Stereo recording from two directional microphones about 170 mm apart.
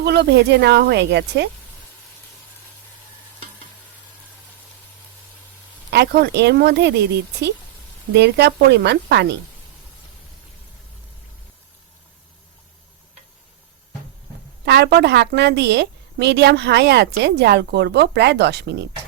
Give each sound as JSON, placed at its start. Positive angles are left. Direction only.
{"t": 0.0, "sound": "a woman's voice", "side_deg": -75}
{"t": 5.9, "sound": "a woman's voice", "side_deg": -80}
{"t": 14.6, "sound": "a woman's voice", "side_deg": -75}